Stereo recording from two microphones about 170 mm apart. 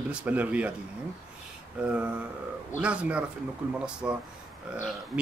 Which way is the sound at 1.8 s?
10° right (ahead or behind).